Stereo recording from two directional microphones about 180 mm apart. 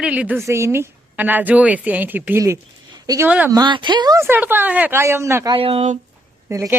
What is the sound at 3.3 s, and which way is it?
Speech, 10° right (ahead or behind).